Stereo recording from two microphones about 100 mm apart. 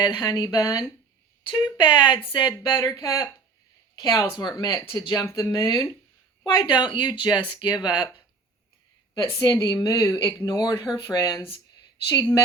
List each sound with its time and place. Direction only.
0.0 s speech: 45° left (ahead or behind)
1.5 s speech: 50° left (ahead or behind)
9.1 s speech: 40° left (ahead or behind)